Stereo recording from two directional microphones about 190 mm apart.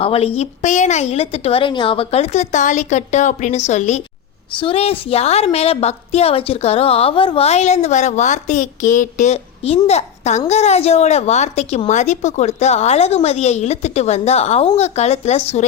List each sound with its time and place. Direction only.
0.0 s a woman's voice: 30° left (ahead or behind)